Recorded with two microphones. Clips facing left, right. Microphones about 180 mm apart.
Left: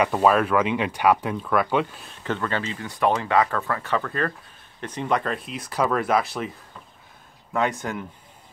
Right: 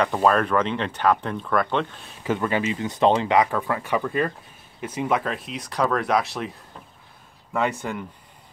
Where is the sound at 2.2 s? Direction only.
10° right (ahead or behind).